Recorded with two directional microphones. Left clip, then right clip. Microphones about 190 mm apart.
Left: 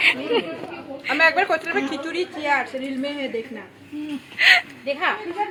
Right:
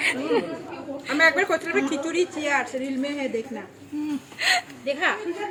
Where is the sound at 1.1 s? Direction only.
35° right (ahead or behind).